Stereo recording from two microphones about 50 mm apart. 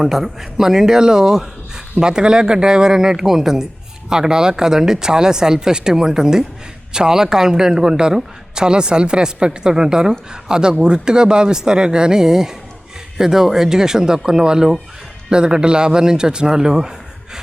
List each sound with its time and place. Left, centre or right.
0.0 s a man's voice: centre